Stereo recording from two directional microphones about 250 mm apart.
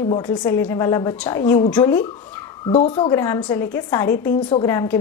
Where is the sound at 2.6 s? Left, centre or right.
Left.